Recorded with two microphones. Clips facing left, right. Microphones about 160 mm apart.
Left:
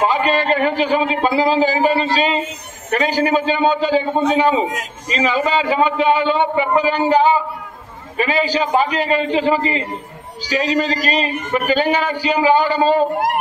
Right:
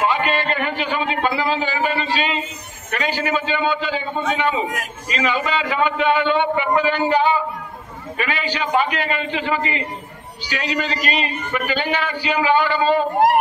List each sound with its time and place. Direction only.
0.0 s a man's voice: 35° left (ahead or behind)
4.6 s a man's voice: 20° left (ahead or behind)
5.1 s a man's voice: 35° left (ahead or behind)